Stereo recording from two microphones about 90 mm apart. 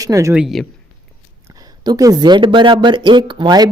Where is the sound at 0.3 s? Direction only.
5° right (ahead or behind).